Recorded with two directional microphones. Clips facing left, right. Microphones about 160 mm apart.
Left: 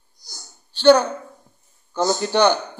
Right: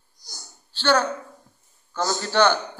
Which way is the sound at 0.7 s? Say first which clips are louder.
Left 8 dB; 15° left (ahead or behind).